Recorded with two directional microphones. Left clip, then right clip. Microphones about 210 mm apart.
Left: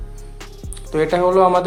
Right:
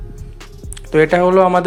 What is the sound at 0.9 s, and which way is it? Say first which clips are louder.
Speech: right 4 dB; 25° right (ahead or behind).